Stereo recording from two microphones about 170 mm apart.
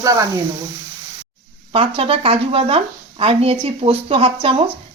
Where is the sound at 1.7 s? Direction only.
35° right (ahead or behind).